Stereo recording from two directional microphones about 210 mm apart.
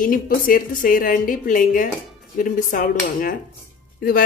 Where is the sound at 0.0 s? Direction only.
40° left (ahead or behind).